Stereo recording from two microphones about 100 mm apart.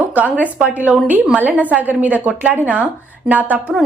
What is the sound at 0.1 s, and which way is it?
A woman's voice, 15° right (ahead or behind).